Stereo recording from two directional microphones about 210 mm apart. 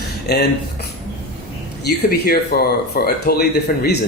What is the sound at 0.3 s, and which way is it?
Speech, 50° left (ahead or behind).